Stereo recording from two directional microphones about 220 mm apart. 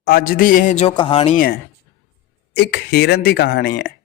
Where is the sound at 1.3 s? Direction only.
40° left (ahead or behind).